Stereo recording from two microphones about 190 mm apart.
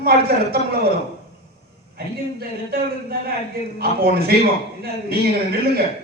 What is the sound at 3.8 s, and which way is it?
A man's voice, 55° right (ahead or behind).